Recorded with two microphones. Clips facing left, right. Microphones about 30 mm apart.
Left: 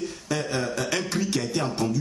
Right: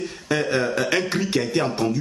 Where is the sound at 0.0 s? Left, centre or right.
Right.